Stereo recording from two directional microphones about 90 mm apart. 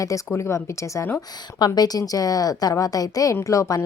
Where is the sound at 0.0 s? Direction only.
35° left (ahead or behind).